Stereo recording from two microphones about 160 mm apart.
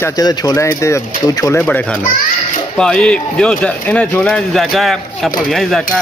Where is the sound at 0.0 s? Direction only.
25° left (ahead or behind).